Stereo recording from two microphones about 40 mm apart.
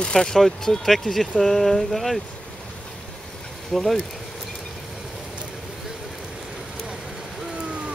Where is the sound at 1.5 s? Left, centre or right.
Centre.